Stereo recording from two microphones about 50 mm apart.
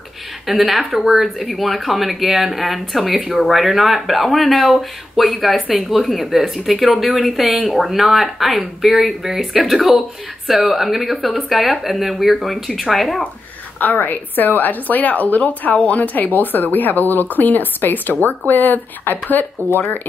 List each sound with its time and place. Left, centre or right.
0.5 s speech: centre
13.7 s a woman's voice: left